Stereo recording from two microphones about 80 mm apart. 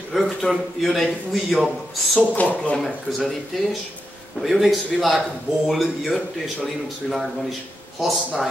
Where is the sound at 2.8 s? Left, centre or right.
Centre.